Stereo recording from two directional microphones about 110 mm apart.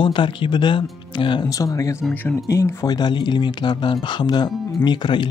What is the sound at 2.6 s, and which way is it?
Speech, 30° left (ahead or behind).